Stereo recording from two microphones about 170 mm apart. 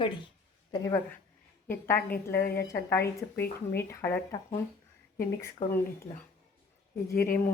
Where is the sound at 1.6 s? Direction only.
10° left (ahead or behind).